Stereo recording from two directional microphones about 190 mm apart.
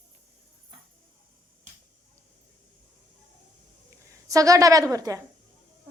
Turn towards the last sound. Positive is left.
turn(degrees=-20)  # may be behind; listen again after turning